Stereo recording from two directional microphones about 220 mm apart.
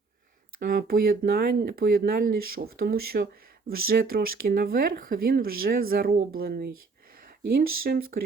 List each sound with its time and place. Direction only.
0.6 s speech: 40° right (ahead or behind)